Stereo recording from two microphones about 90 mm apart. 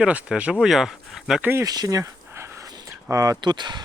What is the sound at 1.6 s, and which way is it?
Speech, 45° right (ahead or behind).